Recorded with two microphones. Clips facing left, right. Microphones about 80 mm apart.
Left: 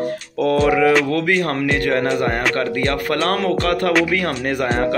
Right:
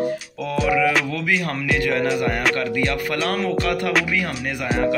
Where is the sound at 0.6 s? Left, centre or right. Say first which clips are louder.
Left 2 dB; left.